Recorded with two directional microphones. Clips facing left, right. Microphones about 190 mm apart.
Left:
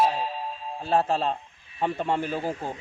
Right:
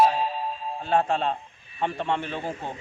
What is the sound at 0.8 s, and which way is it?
A man's voice, 5° left (ahead or behind).